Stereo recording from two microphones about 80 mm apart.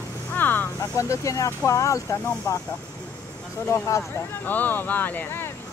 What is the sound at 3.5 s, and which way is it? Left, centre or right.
Speech, left.